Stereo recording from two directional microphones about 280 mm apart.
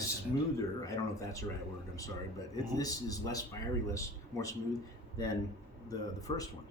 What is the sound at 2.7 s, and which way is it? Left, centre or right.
A man's voice, centre.